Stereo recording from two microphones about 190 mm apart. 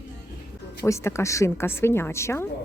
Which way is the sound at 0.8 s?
15° left (ahead or behind).